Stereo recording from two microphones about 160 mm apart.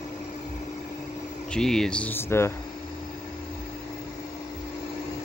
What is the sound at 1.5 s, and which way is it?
Speech, 5° left (ahead or behind).